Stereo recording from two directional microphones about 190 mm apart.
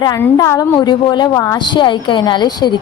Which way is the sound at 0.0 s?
20° left (ahead or behind).